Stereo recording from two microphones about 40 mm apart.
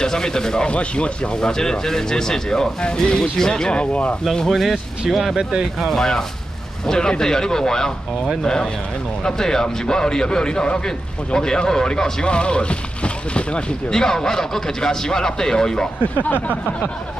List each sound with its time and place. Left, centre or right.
0.0 s speech: centre
0.7 s speech: left
4.5 s speech: centre
5.8 s speech: centre; by 13.9 s left
13.9 s speech: centre
16.2 s a sound: left